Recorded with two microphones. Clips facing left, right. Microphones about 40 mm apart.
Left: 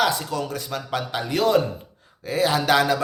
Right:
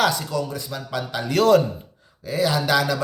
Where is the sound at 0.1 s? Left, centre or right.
Left.